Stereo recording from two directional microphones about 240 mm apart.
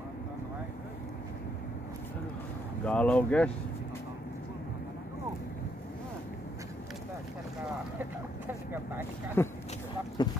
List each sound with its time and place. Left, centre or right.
2.8 s speech: centre
8.0 s speech: centre
9.4 s speech: centre